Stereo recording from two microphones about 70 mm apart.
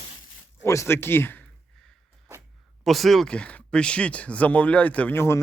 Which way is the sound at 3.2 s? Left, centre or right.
Centre.